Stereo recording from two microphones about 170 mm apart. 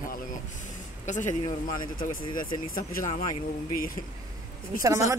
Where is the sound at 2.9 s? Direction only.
50° left (ahead or behind).